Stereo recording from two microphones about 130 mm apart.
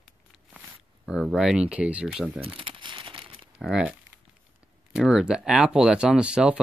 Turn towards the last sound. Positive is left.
turn(degrees=-5)  # may be behind; listen again after turning